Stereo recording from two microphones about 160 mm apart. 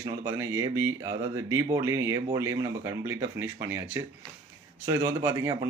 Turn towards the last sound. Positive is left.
turn(degrees=-20)  # may be behind; listen again after turning